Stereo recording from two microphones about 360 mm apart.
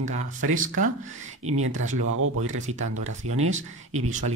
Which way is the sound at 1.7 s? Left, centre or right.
Right.